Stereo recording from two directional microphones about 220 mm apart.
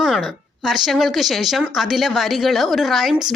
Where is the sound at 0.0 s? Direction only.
Centre (ahead or behind).